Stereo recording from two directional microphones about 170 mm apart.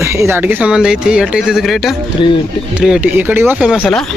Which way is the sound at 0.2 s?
10° right (ahead or behind).